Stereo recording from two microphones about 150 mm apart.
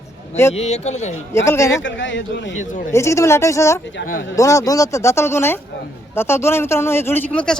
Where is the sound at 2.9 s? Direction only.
20° left (ahead or behind).